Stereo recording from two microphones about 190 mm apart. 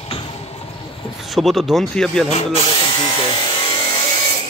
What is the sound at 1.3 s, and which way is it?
Speech, centre (ahead or behind).